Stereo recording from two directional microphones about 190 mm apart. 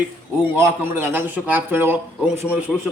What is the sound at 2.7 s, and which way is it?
Speech, centre (ahead or behind).